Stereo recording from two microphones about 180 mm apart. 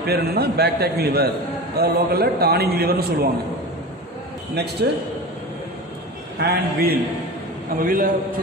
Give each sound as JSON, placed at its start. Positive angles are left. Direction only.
{"t": 0.0, "sound": "a man's voice", "side_deg": -60}
{"t": 6.4, "sound": "a man's voice", "side_deg": -60}